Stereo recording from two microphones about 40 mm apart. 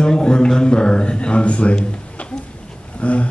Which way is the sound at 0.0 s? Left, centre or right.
Left.